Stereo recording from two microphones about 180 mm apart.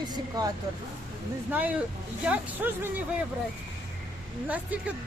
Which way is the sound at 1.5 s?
10° right (ahead or behind).